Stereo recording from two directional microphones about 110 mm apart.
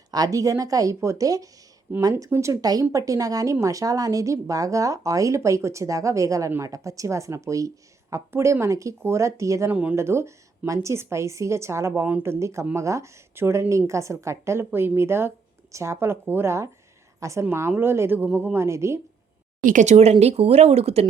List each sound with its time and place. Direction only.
0.1 s a woman's voice: 35° right (ahead or behind)
19.8 s speech: 90° right; by 21.1 s 70° right (ahead or behind)